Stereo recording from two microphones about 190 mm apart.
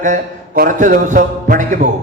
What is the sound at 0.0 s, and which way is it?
Speech, 45° right (ahead or behind).